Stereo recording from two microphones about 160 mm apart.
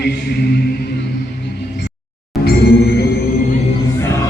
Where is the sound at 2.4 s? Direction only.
80° left.